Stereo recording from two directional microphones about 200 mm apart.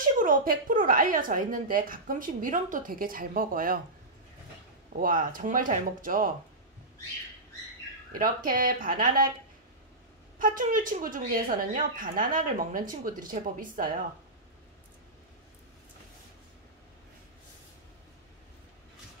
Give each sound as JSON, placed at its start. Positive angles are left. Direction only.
{"t": 0.0, "sound": "a woman's voice", "side_deg": -45}
{"t": 4.9, "sound": "a woman's voice", "side_deg": -40}
{"t": 8.1, "sound": "a woman's voice", "side_deg": -45}
{"t": 10.4, "sound": "a woman's voice", "side_deg": -40}